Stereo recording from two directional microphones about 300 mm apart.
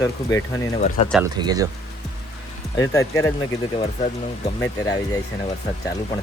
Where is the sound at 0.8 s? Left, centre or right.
Centre.